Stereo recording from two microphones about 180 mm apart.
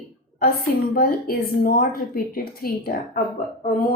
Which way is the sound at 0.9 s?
55° left (ahead or behind).